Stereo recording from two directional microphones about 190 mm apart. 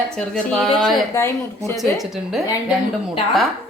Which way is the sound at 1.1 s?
15° left (ahead or behind).